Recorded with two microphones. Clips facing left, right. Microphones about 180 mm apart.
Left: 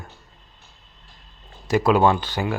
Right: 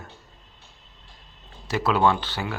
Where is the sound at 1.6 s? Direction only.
15° left (ahead or behind).